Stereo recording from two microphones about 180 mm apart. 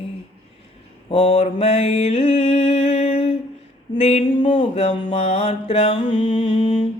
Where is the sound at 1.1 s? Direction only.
30° left (ahead or behind).